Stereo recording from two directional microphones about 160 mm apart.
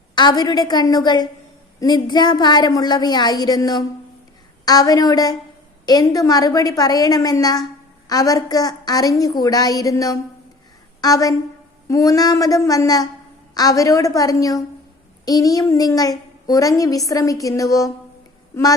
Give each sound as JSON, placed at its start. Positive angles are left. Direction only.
{"t": 0.2, "sound": "a child's voice", "side_deg": 25}